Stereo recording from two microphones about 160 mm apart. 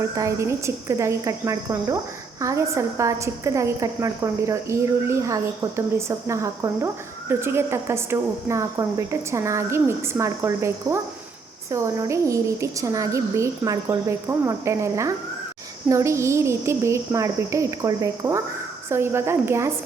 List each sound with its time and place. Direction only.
0.2 s a woman's voice: 20° right (ahead or behind)